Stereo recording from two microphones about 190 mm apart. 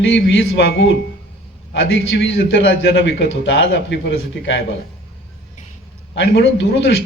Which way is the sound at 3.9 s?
70° left (ahead or behind).